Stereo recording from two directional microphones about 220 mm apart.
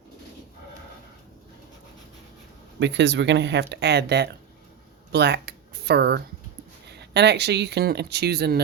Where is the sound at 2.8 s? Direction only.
55° right (ahead or behind).